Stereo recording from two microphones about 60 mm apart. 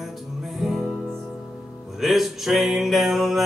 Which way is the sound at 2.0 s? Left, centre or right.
Centre.